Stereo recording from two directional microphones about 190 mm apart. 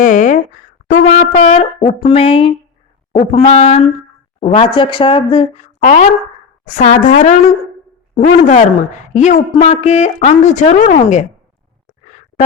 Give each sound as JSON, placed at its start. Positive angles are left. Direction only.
{"t": 0.0, "sound": "a woman's voice", "side_deg": 40}